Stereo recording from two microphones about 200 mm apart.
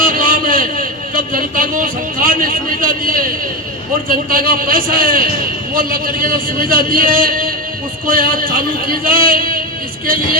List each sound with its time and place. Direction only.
0.0 s a man's voice: 45° right (ahead or behind)